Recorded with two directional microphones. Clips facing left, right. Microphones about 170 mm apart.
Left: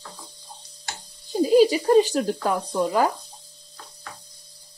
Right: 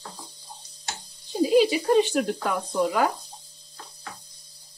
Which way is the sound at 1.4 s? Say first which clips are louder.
Left 3 dB; 40° left (ahead or behind).